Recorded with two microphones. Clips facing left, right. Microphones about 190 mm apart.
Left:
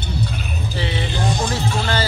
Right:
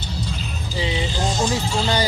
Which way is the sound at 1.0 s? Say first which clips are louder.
Left 1 dB; 60° left (ahead or behind).